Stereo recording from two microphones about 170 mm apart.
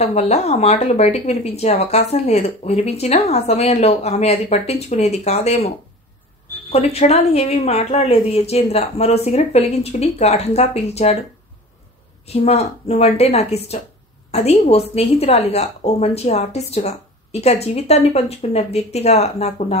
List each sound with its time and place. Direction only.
0.0 s speech: 40° left (ahead or behind)
6.7 s speech: 40° left (ahead or behind)
12.3 s speech: 40° left (ahead or behind)